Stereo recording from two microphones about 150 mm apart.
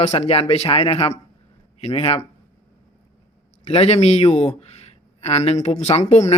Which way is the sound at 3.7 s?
45° left (ahead or behind).